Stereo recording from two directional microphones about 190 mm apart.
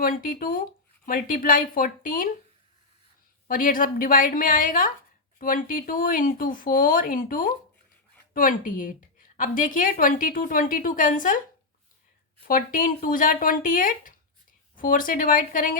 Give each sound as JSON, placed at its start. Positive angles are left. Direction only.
{"t": 0.0, "sound": "speech", "side_deg": 50}
{"t": 3.4, "sound": "speech", "side_deg": 45}
{"t": 12.5, "sound": "speech", "side_deg": 45}